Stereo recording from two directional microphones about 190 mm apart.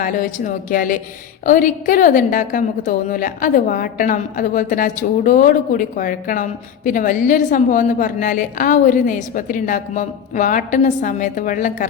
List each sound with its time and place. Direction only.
0.0 s a woman's voice: 45° left (ahead or behind)